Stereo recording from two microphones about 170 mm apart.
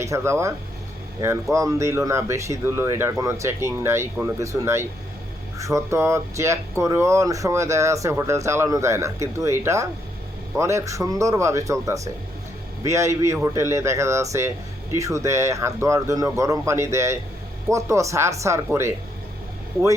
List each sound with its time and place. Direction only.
0.0 s speech: 15° right (ahead or behind)
1.5 s speech: 20° right (ahead or behind)